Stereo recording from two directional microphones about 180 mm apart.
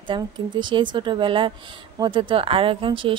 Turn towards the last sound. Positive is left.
turn(degrees=-30)  # may be behind; listen again after turning